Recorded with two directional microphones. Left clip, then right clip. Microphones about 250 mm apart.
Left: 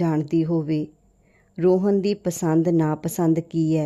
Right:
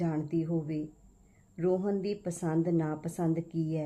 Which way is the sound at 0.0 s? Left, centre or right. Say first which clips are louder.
Left 10 dB; left.